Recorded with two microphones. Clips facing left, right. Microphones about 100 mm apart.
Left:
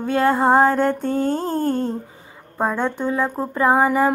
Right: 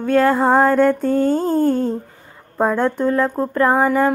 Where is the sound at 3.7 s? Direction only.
20° left (ahead or behind).